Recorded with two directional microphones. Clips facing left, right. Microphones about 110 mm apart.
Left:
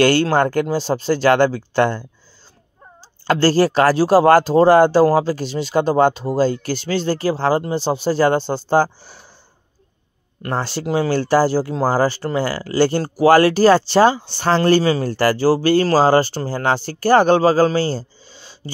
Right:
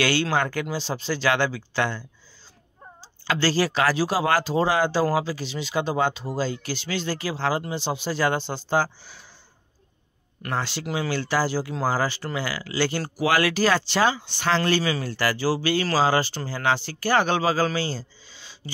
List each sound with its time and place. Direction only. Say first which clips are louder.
0.0 s speech: left 8 dB; 45° left (ahead or behind)
3.3 s speech: left 8 dB; 45° left (ahead or behind)
10.4 s speech: left 6 dB; 40° left (ahead or behind)